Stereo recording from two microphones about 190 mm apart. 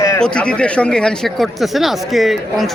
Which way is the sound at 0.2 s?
5° left (ahead or behind).